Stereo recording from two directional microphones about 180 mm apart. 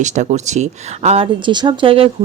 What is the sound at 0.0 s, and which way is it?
Speech, 40° right (ahead or behind).